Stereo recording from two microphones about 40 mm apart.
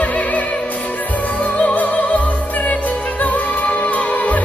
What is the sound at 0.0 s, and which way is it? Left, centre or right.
Opera, left.